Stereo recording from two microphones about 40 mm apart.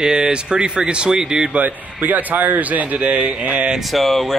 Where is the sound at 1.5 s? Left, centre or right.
Right.